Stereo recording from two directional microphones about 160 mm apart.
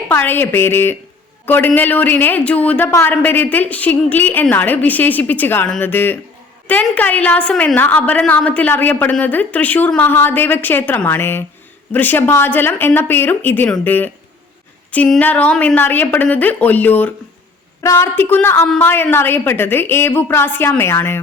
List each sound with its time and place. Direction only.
0.1 s a woman's voice: 15° left (ahead or behind)